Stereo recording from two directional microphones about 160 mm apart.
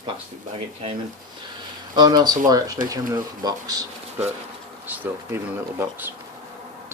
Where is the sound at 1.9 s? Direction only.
25° right (ahead or behind).